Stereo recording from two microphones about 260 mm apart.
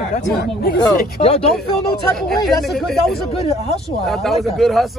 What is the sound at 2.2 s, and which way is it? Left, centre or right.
Speech, centre.